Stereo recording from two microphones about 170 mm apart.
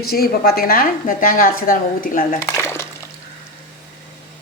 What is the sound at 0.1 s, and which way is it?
A woman's voice, 65° left (ahead or behind).